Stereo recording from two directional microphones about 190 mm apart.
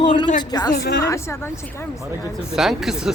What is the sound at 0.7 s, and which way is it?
Speech, 60° left (ahead or behind).